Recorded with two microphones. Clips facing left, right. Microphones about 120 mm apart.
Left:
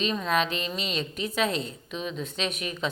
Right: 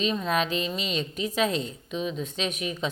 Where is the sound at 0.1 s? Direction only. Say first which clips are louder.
Even; 25° right (ahead or behind).